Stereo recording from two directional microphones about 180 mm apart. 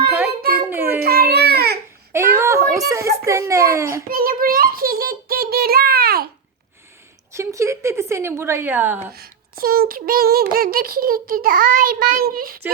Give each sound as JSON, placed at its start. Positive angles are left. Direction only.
{"t": 0.7, "sound": "a sound", "side_deg": -10}
{"t": 0.9, "sound": "baby cry", "side_deg": -60}
{"t": 2.1, "sound": "a sound", "side_deg": -15}
{"t": 3.2, "sound": "a woman's voice", "side_deg": -15}
{"t": 4.1, "sound": "child singing", "side_deg": -55}
{"t": 7.3, "sound": "a woman's voice", "side_deg": -15}
{"t": 9.1, "sound": "child singing", "side_deg": -55}